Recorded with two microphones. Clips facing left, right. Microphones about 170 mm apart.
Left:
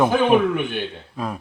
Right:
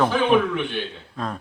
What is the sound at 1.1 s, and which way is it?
Speech, 10° left (ahead or behind).